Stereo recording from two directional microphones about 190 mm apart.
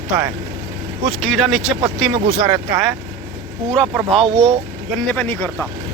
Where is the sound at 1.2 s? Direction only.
Centre (ahead or behind).